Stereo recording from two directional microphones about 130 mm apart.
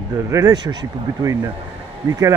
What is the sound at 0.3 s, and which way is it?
Speech, 30° right (ahead or behind).